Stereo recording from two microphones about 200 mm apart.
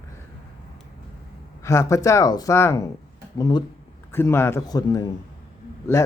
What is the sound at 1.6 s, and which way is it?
A man's voice, 15° left (ahead or behind).